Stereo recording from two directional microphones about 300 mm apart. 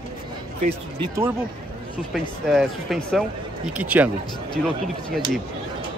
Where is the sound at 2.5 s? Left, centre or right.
Centre.